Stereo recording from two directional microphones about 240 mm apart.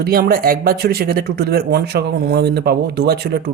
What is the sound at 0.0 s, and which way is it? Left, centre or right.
Speech, right.